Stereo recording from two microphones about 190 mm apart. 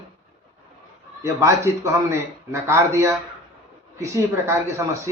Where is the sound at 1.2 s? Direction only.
15° right (ahead or behind).